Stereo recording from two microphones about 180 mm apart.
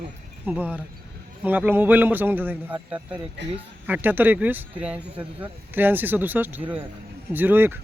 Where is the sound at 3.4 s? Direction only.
80° right.